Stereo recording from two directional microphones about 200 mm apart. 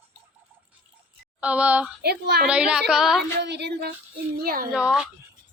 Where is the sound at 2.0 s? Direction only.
55° right (ahead or behind).